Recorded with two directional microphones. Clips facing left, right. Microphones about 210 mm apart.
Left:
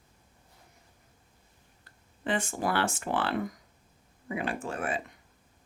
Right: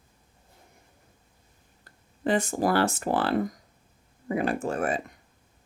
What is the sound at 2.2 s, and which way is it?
Speech, 40° right (ahead or behind).